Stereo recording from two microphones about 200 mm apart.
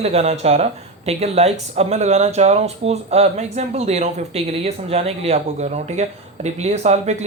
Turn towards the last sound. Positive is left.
turn(degrees=-35)  # may be behind; listen again after turning